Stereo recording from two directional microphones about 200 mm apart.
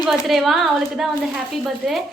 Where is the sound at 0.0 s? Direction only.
Centre (ahead or behind).